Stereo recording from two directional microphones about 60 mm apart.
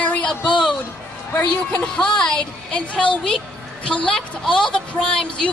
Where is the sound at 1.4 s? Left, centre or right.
Centre.